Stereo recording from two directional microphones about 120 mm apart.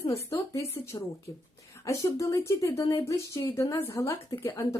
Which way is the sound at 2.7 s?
50° left (ahead or behind).